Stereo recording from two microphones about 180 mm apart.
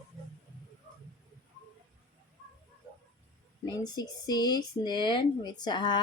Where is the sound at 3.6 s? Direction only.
25° left (ahead or behind).